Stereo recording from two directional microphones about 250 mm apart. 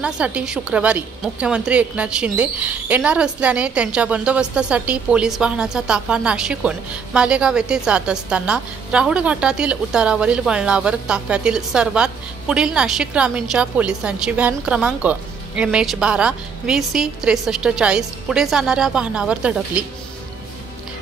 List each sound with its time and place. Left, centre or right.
0.0 s a woman's voice: centre